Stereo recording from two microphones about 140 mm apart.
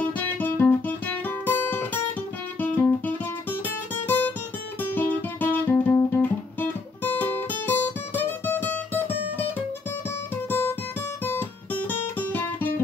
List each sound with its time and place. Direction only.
0.0 s music: 15° left (ahead or behind)
2.6 s guitar: 10° left (ahead or behind)
4.8 s music: 15° left (ahead or behind)
10.3 s music: 15° left (ahead or behind)
11.2 s guitar: 15° left (ahead or behind)